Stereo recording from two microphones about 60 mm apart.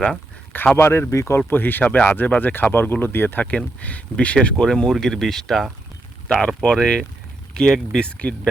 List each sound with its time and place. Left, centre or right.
0.8 s speech: left
1.5 s speech: left; by 8.4 s centre